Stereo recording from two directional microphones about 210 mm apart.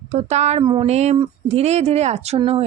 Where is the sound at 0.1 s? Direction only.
30° right (ahead or behind).